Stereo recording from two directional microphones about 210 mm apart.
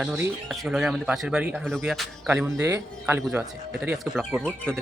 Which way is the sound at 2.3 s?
10° right (ahead or behind).